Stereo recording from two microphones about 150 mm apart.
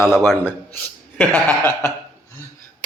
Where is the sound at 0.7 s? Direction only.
10° left (ahead or behind).